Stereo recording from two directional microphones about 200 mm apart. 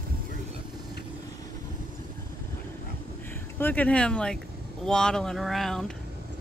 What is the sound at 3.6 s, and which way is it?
Speech, 10° left (ahead or behind).